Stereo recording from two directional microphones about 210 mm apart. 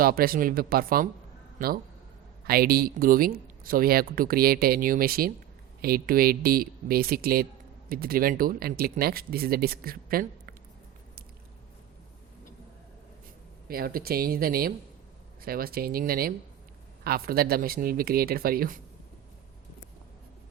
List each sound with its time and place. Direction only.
0.0 s speech: 45° right (ahead or behind)
13.7 s speech: 45° right (ahead or behind)